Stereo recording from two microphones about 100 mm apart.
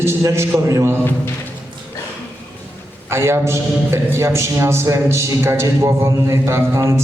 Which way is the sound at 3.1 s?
25° right (ahead or behind).